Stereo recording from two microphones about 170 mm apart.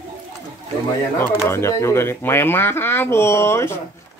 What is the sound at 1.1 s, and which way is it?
Speech, 15° left (ahead or behind).